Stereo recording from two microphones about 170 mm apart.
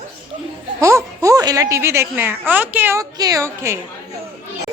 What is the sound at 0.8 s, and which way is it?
Speech, 20° right (ahead or behind).